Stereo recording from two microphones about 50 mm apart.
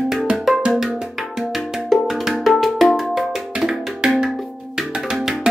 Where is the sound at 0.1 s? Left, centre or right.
Centre.